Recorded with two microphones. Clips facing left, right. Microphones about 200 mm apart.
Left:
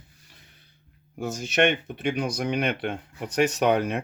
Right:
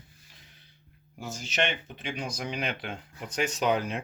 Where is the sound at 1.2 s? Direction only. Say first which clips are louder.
Left 7 dB; 60° left (ahead or behind).